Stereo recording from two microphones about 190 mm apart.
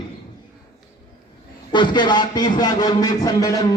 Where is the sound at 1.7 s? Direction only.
25° left (ahead or behind).